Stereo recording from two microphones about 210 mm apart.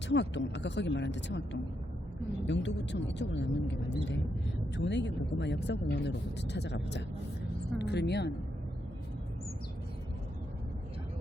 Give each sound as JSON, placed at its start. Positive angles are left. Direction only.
{"t": 0.2, "sound": "speech", "side_deg": 55}
{"t": 2.5, "sound": "a woman's voice", "side_deg": 55}